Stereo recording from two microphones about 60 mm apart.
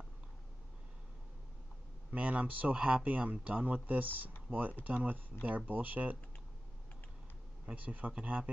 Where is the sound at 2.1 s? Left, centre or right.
Right.